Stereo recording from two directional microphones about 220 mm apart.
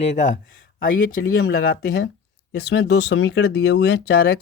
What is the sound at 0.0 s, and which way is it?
Speech, 30° left (ahead or behind).